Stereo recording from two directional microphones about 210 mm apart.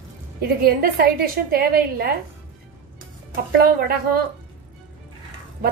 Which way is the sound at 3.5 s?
45° right (ahead or behind).